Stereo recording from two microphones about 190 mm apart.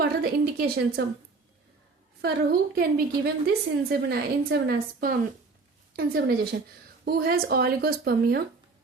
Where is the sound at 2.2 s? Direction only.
55° right (ahead or behind).